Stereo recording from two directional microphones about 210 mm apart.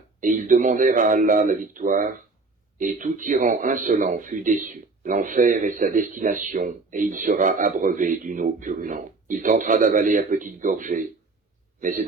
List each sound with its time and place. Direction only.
0.2 s a man's voice: 40° right (ahead or behind)